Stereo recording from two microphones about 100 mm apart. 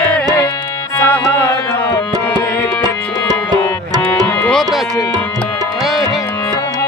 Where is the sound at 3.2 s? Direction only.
40° right (ahead or behind).